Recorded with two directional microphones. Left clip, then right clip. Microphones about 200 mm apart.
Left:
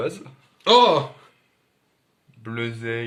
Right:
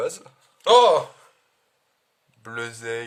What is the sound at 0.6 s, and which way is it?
Speech, 55° right (ahead or behind).